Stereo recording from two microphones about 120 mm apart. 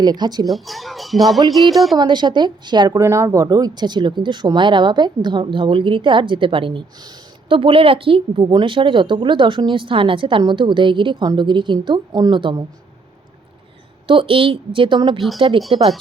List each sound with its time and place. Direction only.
0.0 s a woman's voice: 35° right (ahead or behind)
0.4 s speech: centre (ahead or behind)
2.0 s a woman's voice: 40° right (ahead or behind)
3.0 s speech: 25° right (ahead or behind); by 12.6 s 40° right (ahead or behind)
14.1 s speech: 45° right (ahead or behind)